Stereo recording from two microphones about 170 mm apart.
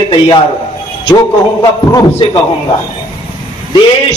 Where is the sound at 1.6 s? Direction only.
25° left (ahead or behind).